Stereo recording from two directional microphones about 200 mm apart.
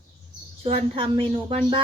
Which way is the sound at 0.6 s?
30° right (ahead or behind).